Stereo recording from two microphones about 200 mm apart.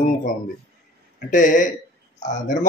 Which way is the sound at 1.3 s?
40° left (ahead or behind).